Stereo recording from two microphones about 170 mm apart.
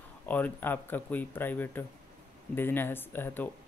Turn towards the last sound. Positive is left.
turn(degrees=10)  # may be behind; listen again after turning